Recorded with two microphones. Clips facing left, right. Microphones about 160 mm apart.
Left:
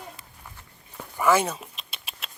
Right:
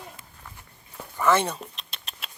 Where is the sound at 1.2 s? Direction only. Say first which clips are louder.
Left 1 dB; 5° left (ahead or behind).